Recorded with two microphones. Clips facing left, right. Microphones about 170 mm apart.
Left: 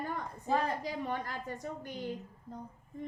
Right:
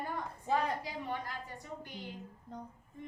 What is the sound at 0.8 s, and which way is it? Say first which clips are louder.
A woman's voice: left 3 dB; 45° left (ahead or behind).